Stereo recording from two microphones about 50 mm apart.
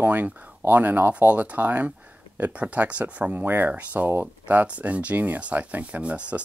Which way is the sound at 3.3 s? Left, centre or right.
Right.